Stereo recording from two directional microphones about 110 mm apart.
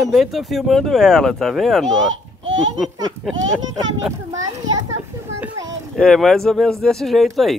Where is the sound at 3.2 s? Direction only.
Centre (ahead or behind).